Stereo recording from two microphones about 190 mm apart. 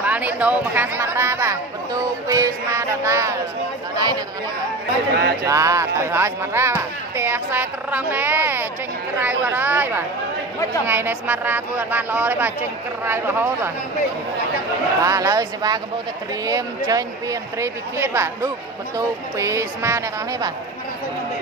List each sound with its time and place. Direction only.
0.0 s speech: 10° right (ahead or behind)
5.1 s speech: 60° right (ahead or behind)
5.5 s speech: 15° right (ahead or behind)
15.0 s speech: 15° right (ahead or behind)